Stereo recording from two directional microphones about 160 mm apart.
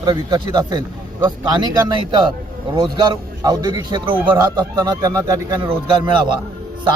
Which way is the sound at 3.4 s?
25° right (ahead or behind).